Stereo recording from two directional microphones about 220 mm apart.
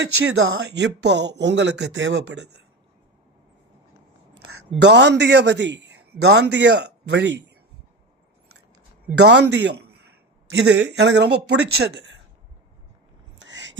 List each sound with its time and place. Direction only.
0.3 s speech: 55° right (ahead or behind)
4.8 s a man's voice: 50° right (ahead or behind)
9.1 s a man's voice: 50° right (ahead or behind)
13.4 s a sound: 55° right (ahead or behind)